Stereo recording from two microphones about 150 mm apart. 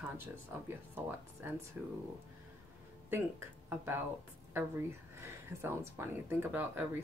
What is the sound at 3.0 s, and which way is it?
Speech, 15° right (ahead or behind).